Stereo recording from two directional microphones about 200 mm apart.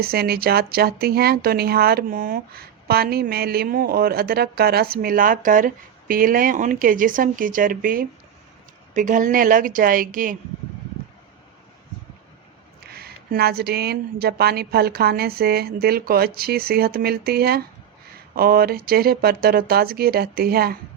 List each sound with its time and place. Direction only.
0.0 s speech: 50° right (ahead or behind)
12.8 s speech: 50° right (ahead or behind)